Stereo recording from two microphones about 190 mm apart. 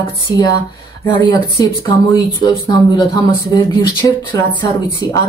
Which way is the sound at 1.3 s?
20° left (ahead or behind).